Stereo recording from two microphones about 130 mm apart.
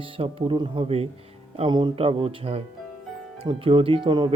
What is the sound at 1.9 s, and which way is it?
Speech, 45° right (ahead or behind).